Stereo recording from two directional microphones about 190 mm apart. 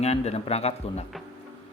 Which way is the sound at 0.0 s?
35° left (ahead or behind).